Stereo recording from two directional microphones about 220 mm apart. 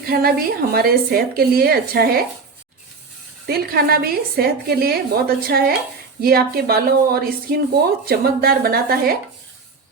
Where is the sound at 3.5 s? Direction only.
45° right (ahead or behind).